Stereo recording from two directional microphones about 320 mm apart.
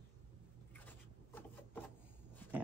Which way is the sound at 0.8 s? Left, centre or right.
Centre.